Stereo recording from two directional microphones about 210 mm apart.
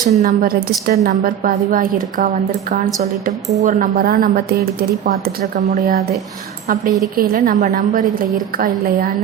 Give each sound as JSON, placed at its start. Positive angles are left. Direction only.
{"t": 0.0, "sound": "a woman's voice", "side_deg": -35}
{"t": 7.2, "sound": "a woman's voice", "side_deg": -40}